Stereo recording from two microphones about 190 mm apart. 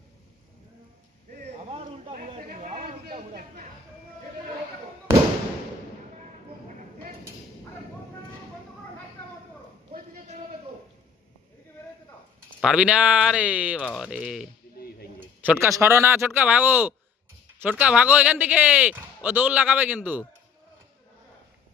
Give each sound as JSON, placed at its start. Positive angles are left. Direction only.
{"t": 1.3, "sound": "a sound", "side_deg": -35}
{"t": 2.1, "sound": "chatter", "side_deg": -45}
{"t": 3.3, "sound": "speech", "side_deg": -45}
{"t": 12.6, "sound": "speech", "side_deg": -5}
{"t": 14.8, "sound": "a sound", "side_deg": 55}
{"t": 15.4, "sound": "speech", "side_deg": -10}